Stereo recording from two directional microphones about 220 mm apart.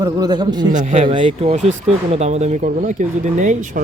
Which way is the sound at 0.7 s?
35° right (ahead or behind).